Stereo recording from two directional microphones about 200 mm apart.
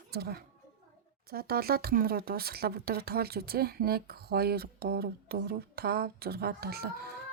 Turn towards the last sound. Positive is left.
turn(degrees=-50)  # may be behind; listen again after turning